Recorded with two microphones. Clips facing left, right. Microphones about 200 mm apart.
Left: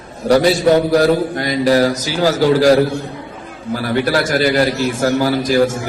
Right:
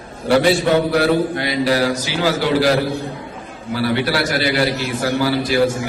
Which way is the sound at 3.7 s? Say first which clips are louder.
Left 2 dB; 45° left (ahead or behind).